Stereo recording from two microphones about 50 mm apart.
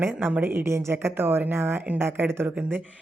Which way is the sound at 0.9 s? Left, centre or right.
Right.